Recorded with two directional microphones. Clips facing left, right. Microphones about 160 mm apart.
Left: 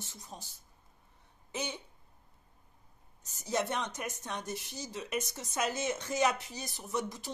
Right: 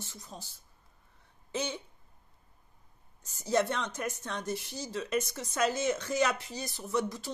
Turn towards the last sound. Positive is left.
turn(degrees=20)  # may be behind; listen again after turning